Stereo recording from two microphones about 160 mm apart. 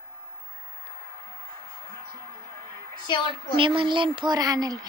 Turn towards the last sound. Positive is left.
turn(degrees=-25)  # may be behind; listen again after turning